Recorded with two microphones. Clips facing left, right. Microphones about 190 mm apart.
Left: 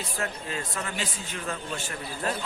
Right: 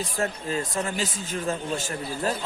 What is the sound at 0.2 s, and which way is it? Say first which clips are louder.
Speech: right 6 dB; 35° right (ahead or behind).